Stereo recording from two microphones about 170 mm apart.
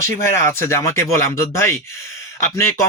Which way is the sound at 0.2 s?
15° left (ahead or behind).